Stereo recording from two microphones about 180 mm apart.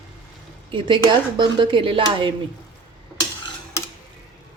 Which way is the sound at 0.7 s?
25° right (ahead or behind).